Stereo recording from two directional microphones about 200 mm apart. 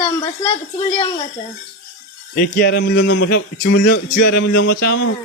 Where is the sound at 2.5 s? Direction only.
55° left (ahead or behind).